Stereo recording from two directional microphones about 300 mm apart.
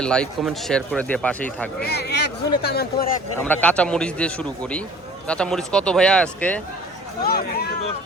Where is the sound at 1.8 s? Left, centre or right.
Left.